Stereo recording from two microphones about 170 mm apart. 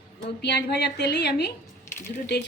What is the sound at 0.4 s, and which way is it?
Speech, 85° left.